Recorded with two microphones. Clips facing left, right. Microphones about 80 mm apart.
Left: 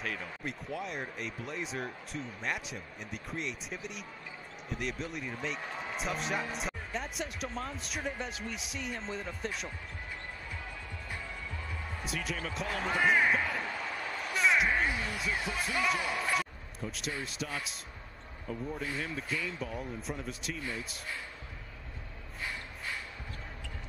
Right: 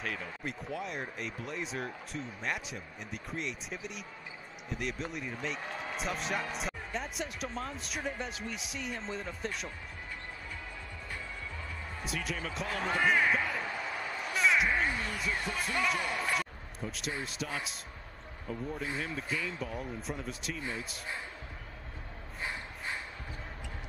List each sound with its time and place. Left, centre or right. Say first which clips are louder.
0.0 s speech: even; centre
12.0 s speech: even; centre
14.3 s slam: even; centre
17.2 s speech: right 1 dB; centre
22.4 s a sound: right 1 dB; right